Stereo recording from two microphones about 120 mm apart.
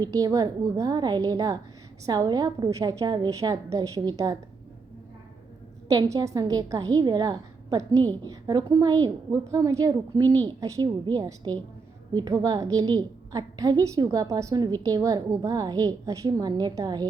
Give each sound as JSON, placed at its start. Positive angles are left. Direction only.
{"t": 0.0, "sound": "a woman's voice", "side_deg": -35}
{"t": 5.9, "sound": "a woman's voice", "side_deg": -30}